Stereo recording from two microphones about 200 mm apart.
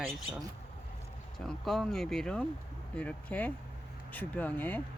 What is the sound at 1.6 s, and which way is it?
Speech, centre (ahead or behind).